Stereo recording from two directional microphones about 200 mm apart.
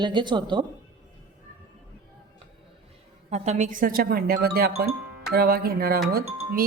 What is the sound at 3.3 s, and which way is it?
Speech, 35° right (ahead or behind).